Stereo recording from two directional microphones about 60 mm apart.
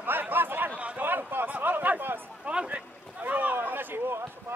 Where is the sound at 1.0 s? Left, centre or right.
Right.